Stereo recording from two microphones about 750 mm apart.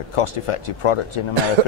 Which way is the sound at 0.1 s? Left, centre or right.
Left.